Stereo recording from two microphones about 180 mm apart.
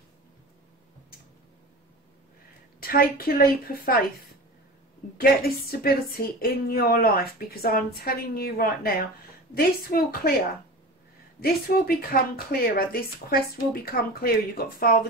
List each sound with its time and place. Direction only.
2.8 s a woman's voice: 55° left (ahead or behind)
5.1 s a woman's voice: 55° left (ahead or behind)
11.3 s a woman's voice: 55° left (ahead or behind)